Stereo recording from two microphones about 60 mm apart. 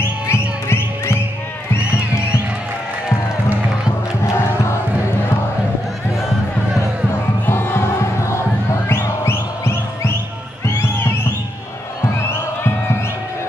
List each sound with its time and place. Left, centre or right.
0.3 s music: left
7.4 s music: left